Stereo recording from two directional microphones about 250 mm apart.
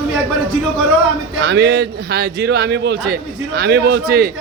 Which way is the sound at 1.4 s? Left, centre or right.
Right.